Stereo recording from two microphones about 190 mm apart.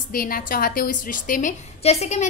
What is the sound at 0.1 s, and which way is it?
A woman's voice, 50° left (ahead or behind).